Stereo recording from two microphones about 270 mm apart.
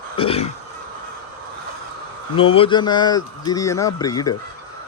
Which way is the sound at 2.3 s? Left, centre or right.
Centre.